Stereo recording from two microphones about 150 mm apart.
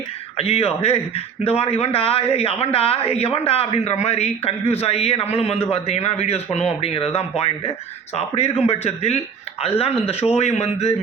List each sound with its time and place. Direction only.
0.3 s a man's voice: 40° left (ahead or behind)